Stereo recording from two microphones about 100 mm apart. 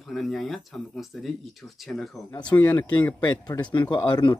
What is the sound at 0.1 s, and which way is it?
Speech, centre (ahead or behind).